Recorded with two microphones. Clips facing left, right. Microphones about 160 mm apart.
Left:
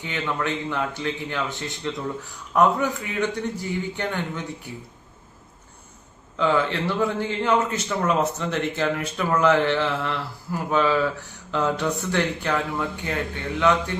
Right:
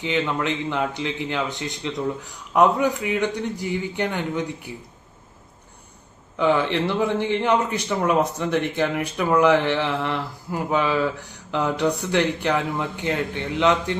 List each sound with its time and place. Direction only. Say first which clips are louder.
0.0 s speech: right 4 dB; 20° right (ahead or behind)
6.4 s speech: right 2 dB; 15° right (ahead or behind)